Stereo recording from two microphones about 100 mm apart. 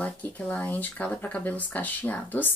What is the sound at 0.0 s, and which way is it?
Speech, 15° left (ahead or behind).